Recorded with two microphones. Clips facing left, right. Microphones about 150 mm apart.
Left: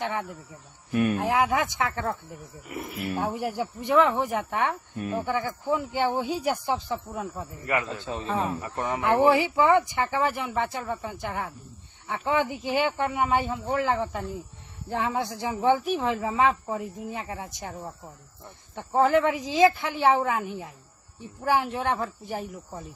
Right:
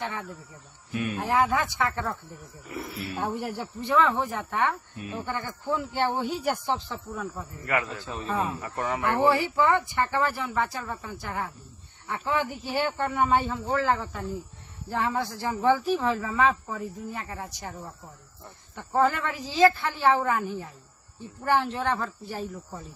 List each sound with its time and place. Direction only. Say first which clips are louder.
0.9 s speech: left 6 dB; 55° left (ahead or behind)
1.2 s speech: left 1 dB; 15° left (ahead or behind)
4.9 s speech: left 6 dB; 50° left (ahead or behind)
5.7 s speech: left 1 dB; 10° left (ahead or behind)
18.8 s speech: left 3 dB; 20° left (ahead or behind)